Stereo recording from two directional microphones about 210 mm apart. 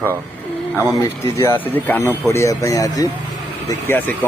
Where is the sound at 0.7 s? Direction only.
10° right (ahead or behind).